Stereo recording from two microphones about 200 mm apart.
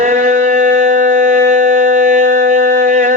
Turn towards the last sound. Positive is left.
turn(degrees=-40)  # may be behind; listen again after turning